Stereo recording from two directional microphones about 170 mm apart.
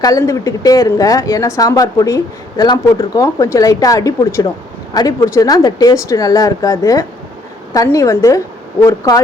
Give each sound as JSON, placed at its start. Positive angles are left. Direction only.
{"t": 0.0, "sound": "speech", "side_deg": 20}